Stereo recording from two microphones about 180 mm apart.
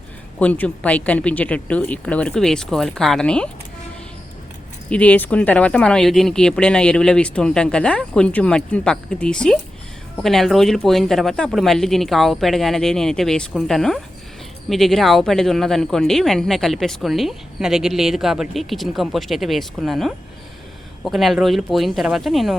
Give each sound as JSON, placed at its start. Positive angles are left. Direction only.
{"t": 0.3, "sound": "speech", "side_deg": 10}
{"t": 4.9, "sound": "speech", "side_deg": 5}